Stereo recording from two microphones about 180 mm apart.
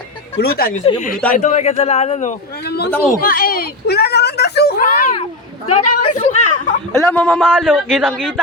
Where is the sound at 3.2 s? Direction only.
55° left (ahead or behind).